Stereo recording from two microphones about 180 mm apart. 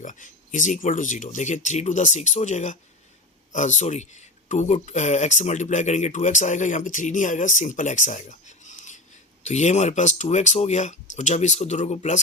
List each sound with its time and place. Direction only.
0.0 s speech: 45° left (ahead or behind)